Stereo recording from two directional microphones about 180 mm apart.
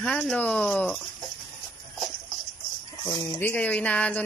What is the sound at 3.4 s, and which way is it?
Speech, 10° left (ahead or behind).